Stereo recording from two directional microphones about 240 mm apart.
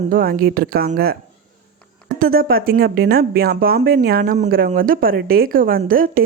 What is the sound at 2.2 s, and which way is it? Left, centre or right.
Speech, right.